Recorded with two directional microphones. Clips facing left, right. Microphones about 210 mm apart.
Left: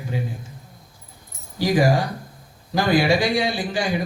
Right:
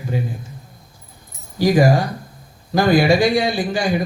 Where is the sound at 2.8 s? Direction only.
45° right (ahead or behind).